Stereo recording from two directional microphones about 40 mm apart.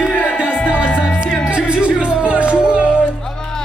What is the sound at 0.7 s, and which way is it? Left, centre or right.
Music, left.